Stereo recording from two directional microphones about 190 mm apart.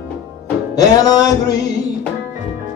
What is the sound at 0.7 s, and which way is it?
Music, 20° left (ahead or behind).